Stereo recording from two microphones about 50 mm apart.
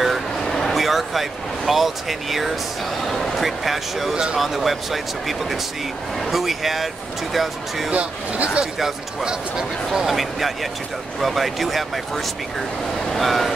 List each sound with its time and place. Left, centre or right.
0.0 s vehicle: centre
3.1 s speech: centre
7.9 s speech: right
8.7 s speech: centre
9.9 s speech: centre
13.0 s vehicle: centre